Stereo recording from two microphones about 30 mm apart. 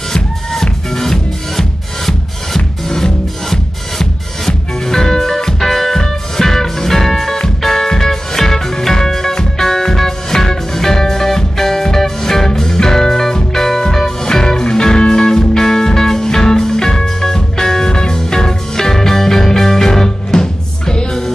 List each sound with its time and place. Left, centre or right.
0.1 s music: centre